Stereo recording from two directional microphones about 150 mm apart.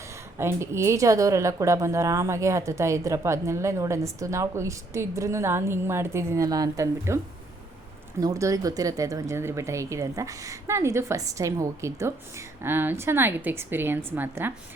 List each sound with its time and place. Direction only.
0.3 s a woman's voice: 15° right (ahead or behind)
8.2 s a woman's voice: 20° right (ahead or behind)